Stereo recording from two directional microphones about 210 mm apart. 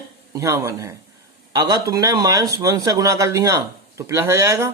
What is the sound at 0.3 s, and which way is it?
A man's voice, 15° right (ahead or behind).